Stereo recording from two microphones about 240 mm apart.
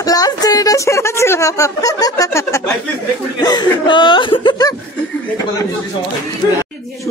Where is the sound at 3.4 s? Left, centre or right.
Centre.